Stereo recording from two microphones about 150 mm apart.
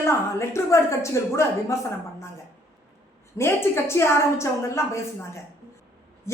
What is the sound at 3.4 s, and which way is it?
A woman's voice, 15° left (ahead or behind).